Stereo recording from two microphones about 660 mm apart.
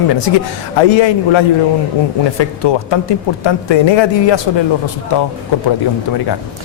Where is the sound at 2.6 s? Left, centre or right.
Left.